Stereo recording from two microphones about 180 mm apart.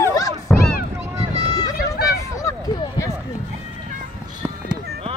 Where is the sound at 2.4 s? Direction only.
20° left (ahead or behind).